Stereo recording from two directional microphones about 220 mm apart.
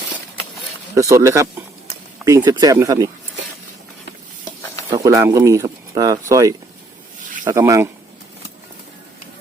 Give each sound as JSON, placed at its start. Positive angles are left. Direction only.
{"t": 0.9, "sound": "speech", "side_deg": -15}
{"t": 5.0, "sound": "speech", "side_deg": -15}